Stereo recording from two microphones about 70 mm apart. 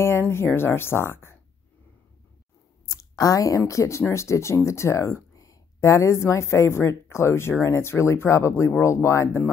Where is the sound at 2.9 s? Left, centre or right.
Left.